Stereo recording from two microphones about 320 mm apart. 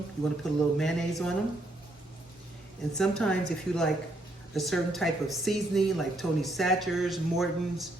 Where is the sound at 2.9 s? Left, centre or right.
Centre.